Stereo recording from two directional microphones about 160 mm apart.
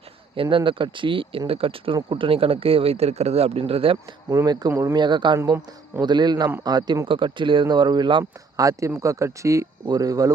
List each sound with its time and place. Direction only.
0.5 s speech: 30° right (ahead or behind)
4.4 s speech: 20° right (ahead or behind)